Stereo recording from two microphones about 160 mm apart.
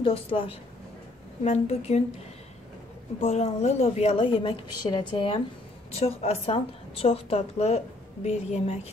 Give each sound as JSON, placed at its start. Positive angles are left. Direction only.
{"t": 0.0, "sound": "a woman's voice", "side_deg": 35}
{"t": 3.2, "sound": "a woman's voice", "side_deg": 45}